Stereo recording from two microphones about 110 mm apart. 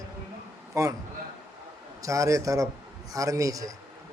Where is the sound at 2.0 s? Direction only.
30° right (ahead or behind).